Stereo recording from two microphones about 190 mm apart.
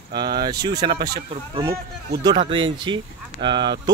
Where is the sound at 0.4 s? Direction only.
20° right (ahead or behind).